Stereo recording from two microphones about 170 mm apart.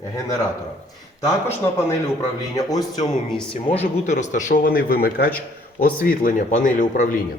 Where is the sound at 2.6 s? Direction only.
20° left (ahead or behind).